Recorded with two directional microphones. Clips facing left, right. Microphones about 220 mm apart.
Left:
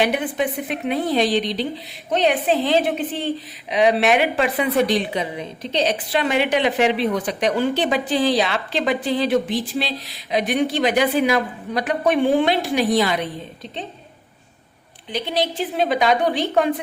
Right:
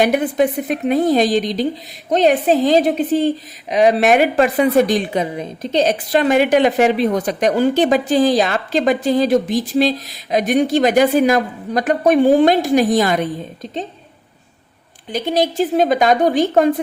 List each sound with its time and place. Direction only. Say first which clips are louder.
0.0 s a woman's voice: right 6 dB; 45° right (ahead or behind)
15.1 s a woman's voice: right 5 dB; 45° right (ahead or behind)